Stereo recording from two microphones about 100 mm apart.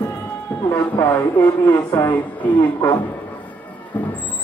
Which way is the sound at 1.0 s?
20° left (ahead or behind).